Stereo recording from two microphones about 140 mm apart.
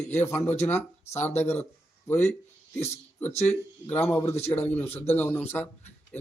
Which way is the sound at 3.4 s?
10° left (ahead or behind).